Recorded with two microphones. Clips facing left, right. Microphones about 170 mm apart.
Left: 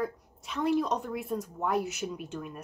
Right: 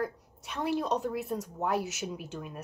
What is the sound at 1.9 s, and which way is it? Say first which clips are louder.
Speech: left 2 dB; 75° right (ahead or behind).